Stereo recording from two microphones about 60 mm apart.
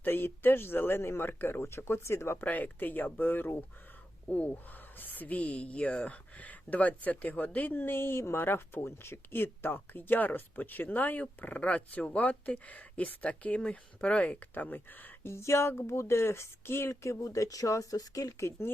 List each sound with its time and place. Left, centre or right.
0.0 s speech: left
1.6 s speech: left
2.4 s speech: left
4.3 s speech: left
14.5 s speech: left